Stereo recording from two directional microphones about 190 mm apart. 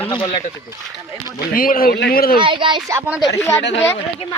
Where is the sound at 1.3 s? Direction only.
50° left (ahead or behind).